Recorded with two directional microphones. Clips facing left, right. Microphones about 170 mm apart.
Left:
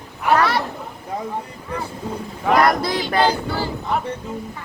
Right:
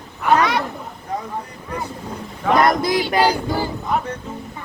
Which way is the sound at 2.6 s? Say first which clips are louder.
Right 2 dB; 20° right (ahead or behind).